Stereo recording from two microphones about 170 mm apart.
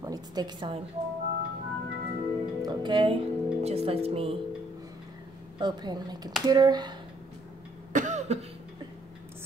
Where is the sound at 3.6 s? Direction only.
35° right (ahead or behind).